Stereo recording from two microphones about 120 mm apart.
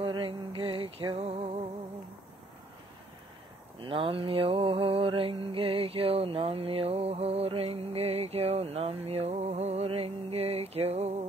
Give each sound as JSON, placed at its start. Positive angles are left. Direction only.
{"t": 0.0, "sound": "music", "side_deg": -45}
{"t": 3.8, "sound": "mantra", "side_deg": -45}
{"t": 7.1, "sound": "a sound", "side_deg": -60}
{"t": 9.8, "sound": "music", "side_deg": -55}